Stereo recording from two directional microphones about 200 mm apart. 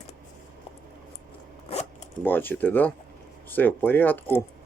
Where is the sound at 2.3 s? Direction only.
10° left (ahead or behind).